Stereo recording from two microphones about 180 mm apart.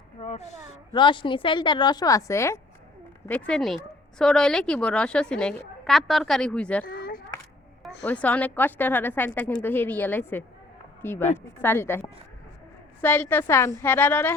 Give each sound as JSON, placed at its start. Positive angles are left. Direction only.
{"t": 0.2, "sound": "speech", "side_deg": 40}
{"t": 0.9, "sound": "a woman's voice", "side_deg": 25}
{"t": 6.8, "sound": "children playing", "side_deg": 55}
{"t": 8.0, "sound": "a woman's voice", "side_deg": 10}